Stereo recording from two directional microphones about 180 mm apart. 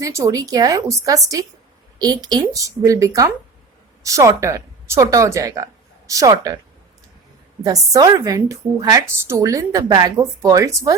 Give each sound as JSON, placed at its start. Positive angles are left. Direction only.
{"t": 0.0, "sound": "a woman's voice", "side_deg": -15}
{"t": 7.6, "sound": "a woman's voice", "side_deg": -20}